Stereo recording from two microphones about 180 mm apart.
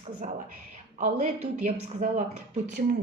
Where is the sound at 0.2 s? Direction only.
45° right (ahead or behind).